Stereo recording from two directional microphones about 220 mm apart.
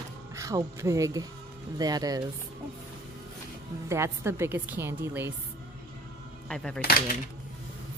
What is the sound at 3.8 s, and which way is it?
A woman's voice, 10° right (ahead or behind).